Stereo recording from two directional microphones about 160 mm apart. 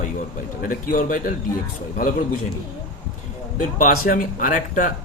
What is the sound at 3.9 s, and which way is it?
Speech, 60° left (ahead or behind).